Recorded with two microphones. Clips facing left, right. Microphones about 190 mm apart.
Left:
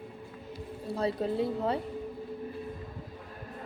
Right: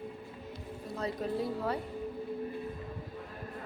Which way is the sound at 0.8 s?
30° left (ahead or behind).